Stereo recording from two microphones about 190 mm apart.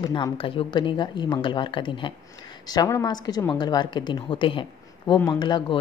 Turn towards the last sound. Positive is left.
turn(degrees=25)  # may be behind; listen again after turning